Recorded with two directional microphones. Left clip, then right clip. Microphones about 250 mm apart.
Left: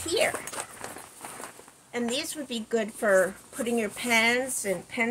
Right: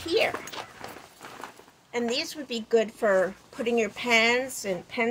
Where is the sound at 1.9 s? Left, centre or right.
Centre.